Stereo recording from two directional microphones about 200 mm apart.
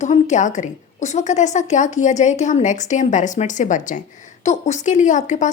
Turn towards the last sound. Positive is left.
turn(degrees=35)  # may be behind; listen again after turning